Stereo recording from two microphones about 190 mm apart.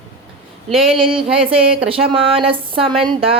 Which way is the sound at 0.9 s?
30° right (ahead or behind).